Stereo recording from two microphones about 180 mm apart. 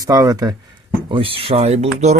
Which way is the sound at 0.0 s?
20° right (ahead or behind).